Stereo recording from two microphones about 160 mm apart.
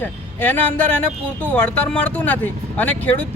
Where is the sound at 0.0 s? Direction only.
10° left (ahead or behind).